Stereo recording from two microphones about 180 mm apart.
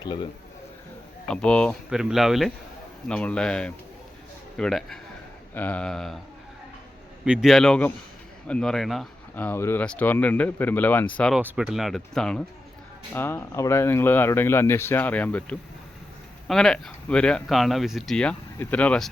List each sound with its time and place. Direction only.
0.0 s a man's voice: 25° left (ahead or behind)
1.3 s speech: 5° left (ahead or behind)
7.3 s speech: centre (ahead or behind)